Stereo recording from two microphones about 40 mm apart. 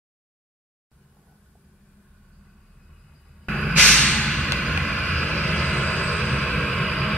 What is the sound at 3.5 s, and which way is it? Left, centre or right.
Hiss, centre.